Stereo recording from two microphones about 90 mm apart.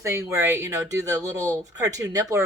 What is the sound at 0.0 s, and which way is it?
A woman's voice, 30° right (ahead or behind).